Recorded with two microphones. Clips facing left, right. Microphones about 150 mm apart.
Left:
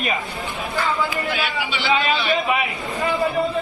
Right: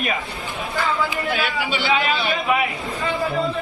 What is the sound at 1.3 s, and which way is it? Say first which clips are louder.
Speech: right 1 dB; 50° right (ahead or behind).